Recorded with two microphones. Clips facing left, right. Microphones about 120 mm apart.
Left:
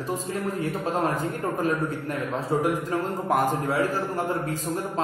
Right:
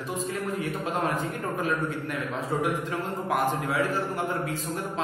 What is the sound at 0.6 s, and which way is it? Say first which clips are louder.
Speech: left 4 dB; 35° left (ahead or behind).